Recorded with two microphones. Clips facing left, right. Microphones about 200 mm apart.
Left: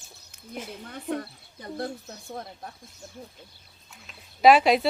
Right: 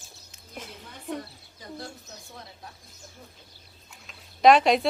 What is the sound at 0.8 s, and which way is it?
Speech, 55° left (ahead or behind).